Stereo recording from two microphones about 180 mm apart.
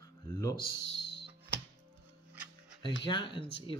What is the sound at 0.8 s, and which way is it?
Music, 70° left (ahead or behind).